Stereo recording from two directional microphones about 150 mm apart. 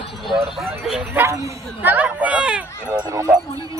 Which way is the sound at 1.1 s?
15° right (ahead or behind).